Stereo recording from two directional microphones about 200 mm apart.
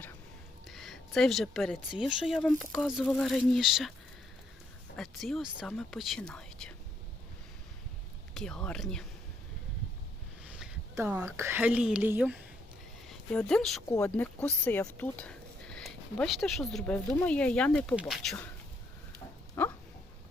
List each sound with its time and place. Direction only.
0.7 s speech: centre (ahead or behind)
4.9 s speech: centre (ahead or behind)
8.4 s speech: 5° left (ahead or behind)
10.9 s a woman's voice: 10° right (ahead or behind)
13.1 s a woman's voice: 5° left (ahead or behind)
19.6 s a sound: 10° left (ahead or behind)